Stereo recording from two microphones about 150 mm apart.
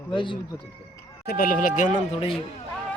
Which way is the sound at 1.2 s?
80° left.